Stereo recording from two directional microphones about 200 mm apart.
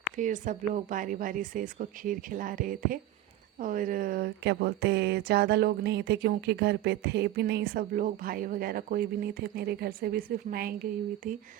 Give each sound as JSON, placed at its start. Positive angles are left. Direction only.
{"t": 0.2, "sound": "a woman's voice", "side_deg": -40}